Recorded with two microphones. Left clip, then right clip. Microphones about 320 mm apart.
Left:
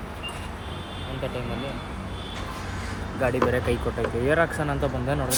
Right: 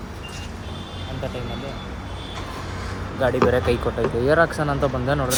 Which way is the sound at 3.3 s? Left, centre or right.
Right.